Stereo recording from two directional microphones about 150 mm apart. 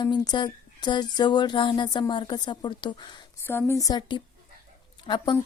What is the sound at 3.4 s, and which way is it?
Speech, 15° left (ahead or behind).